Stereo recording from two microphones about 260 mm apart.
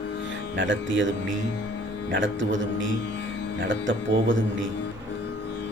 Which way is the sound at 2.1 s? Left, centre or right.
Right.